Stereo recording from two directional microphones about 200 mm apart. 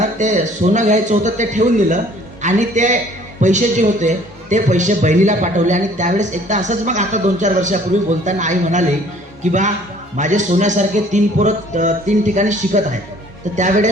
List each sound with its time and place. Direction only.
0.0 s a man's voice: 35° right (ahead or behind)